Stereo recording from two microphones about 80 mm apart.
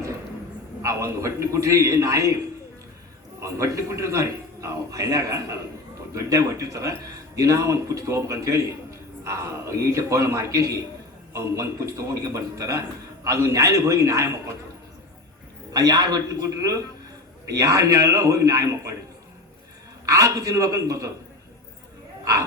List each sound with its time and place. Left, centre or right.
0.8 s a man's voice: right
3.4 s a man's voice: right
15.7 s a man's voice: right
20.1 s a man's voice: right